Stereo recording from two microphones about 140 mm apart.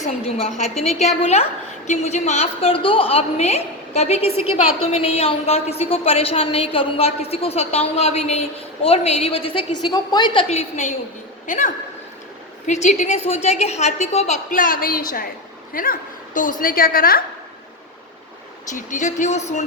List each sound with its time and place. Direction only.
0.0 s a woman's voice: 45° left (ahead or behind)
10.5 s a woman's voice: 55° left (ahead or behind)
11.4 s a woman's voice: 65° left (ahead or behind)
14.5 s a woman's voice: 75° left (ahead or behind); by 17.2 s 90° left
18.7 s speech: 65° left (ahead or behind)